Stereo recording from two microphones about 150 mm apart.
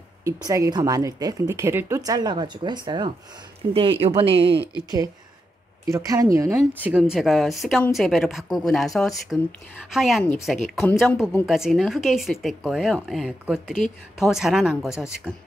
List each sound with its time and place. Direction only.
0.2 s a woman's voice: 20° right (ahead or behind); by 4.6 s 40° right (ahead or behind)
5.9 s a woman's voice: 20° right (ahead or behind)
7.0 s speech: centre (ahead or behind)
10.9 s speech: 10° left (ahead or behind)
11.4 s speech: centre (ahead or behind)